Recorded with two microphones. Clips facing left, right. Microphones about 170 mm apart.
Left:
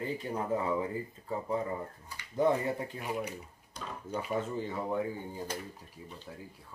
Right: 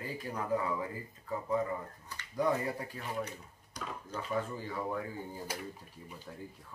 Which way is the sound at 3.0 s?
10° left (ahead or behind).